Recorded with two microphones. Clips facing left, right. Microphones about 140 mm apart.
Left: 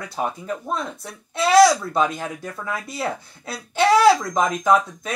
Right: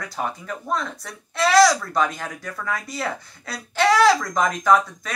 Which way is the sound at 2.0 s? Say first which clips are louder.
Left 2 dB; 25° left (ahead or behind).